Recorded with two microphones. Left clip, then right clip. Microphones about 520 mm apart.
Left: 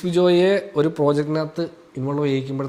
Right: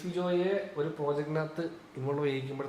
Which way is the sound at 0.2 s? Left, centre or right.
Left.